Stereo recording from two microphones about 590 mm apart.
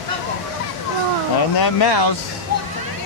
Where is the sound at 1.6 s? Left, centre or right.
Left.